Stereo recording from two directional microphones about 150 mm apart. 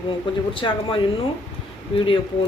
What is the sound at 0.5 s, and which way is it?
Speech, 35° left (ahead or behind).